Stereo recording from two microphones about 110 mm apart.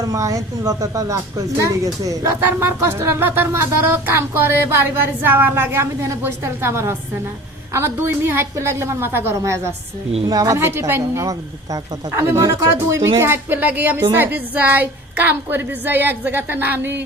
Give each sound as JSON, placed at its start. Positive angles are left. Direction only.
{"t": 0.0, "sound": "a woman's voice", "side_deg": -30}